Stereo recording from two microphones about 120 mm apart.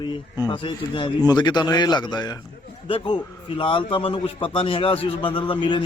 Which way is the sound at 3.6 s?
45° left (ahead or behind).